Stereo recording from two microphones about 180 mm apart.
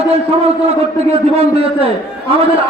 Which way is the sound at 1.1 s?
35° right (ahead or behind).